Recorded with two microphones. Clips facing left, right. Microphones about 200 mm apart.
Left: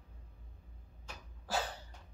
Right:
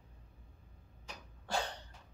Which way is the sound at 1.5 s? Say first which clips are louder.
Even; 5° left (ahead or behind).